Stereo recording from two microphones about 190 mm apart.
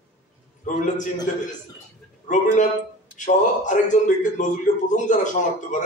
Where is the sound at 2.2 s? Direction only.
40° left (ahead or behind).